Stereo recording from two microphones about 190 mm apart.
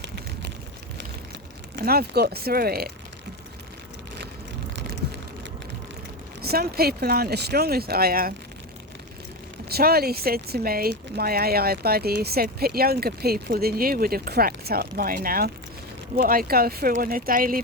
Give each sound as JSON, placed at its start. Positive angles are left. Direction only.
{"t": 1.7, "sound": "speech", "side_deg": -55}
{"t": 6.4, "sound": "speech", "side_deg": -55}
{"t": 9.6, "sound": "speech", "side_deg": -55}